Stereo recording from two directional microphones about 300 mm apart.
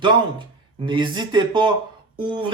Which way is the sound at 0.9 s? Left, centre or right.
Centre.